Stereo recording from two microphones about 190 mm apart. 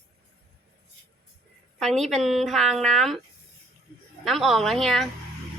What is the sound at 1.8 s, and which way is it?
A woman's voice, centre (ahead or behind).